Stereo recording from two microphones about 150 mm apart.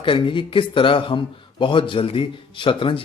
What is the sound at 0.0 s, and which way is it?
Speech, 35° left (ahead or behind).